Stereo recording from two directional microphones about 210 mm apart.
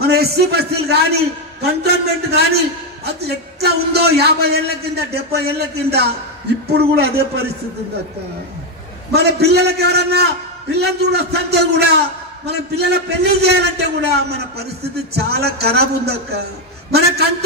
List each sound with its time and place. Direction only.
0.0 s a man's voice: 50° right (ahead or behind)
3.2 s a man's voice: 50° right (ahead or behind)
9.1 s a man's voice: 50° right (ahead or behind)